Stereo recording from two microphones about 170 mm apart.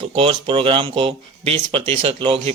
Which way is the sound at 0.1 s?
35° right (ahead or behind).